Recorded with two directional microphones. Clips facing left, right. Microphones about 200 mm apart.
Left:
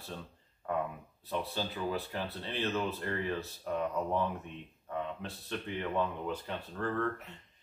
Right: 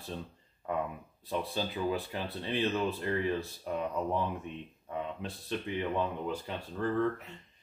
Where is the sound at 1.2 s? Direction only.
15° right (ahead or behind).